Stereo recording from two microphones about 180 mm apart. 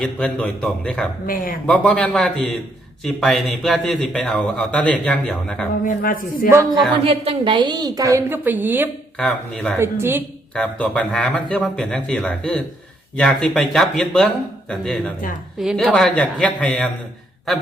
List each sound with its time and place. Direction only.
0.0 s a man's voice: 5° left (ahead or behind)
1.3 s a woman's voice: 50° left (ahead or behind)
1.6 s a man's voice: 5° left (ahead or behind)
5.8 s a woman's voice: 50° left (ahead or behind)
6.7 s a man's voice: centre (ahead or behind)
7.0 s a woman's voice: 35° right (ahead or behind); by 8.9 s 10° right (ahead or behind)
9.1 s a man's voice: 5° left (ahead or behind)
9.7 s a woman's voice: 15° right (ahead or behind)
10.5 s a man's voice: 5° left (ahead or behind)